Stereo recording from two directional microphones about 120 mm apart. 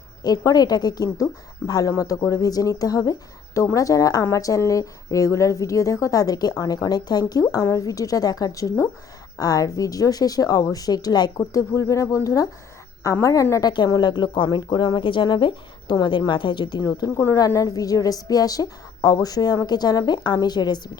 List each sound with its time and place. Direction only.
0.2 s a woman's voice: 30° left (ahead or behind)